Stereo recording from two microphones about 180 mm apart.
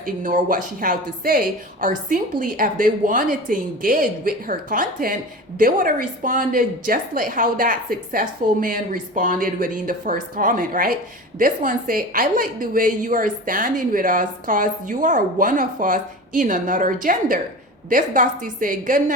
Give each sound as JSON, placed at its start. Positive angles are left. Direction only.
{"t": 0.0, "sound": "a woman's voice", "side_deg": -45}